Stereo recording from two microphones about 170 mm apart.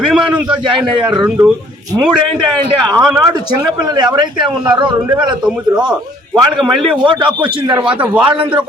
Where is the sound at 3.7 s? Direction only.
25° right (ahead or behind).